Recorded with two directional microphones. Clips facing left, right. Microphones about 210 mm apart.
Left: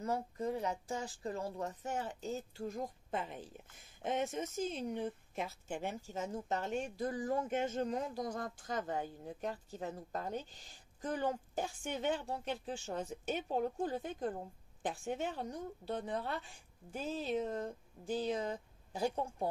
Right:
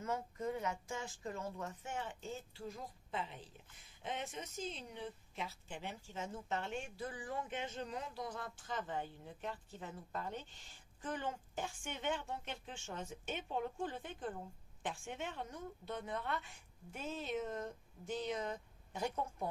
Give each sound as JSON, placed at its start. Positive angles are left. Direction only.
{"t": 0.0, "sound": "speech", "side_deg": 35}